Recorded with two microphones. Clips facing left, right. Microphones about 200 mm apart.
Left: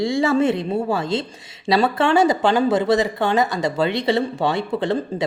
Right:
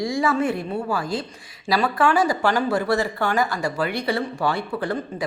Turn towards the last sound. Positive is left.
turn(degrees=25)  # may be behind; listen again after turning